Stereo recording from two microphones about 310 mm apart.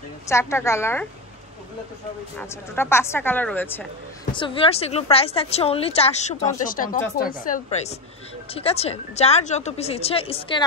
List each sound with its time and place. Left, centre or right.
0.3 s speech: centre
2.3 s speech: centre
4.3 s a woman's voice: centre